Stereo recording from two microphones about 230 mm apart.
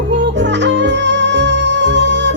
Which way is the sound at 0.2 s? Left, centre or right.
Right.